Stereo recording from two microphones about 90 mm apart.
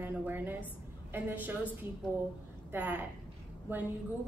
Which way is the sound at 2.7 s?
20° right (ahead or behind).